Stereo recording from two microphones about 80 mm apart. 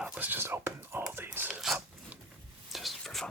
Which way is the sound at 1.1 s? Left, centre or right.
Right.